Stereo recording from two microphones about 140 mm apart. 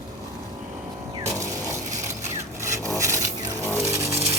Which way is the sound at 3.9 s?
20° right (ahead or behind).